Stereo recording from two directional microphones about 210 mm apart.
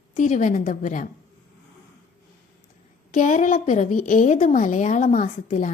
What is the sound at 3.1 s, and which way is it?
A woman's voice, 40° left (ahead or behind).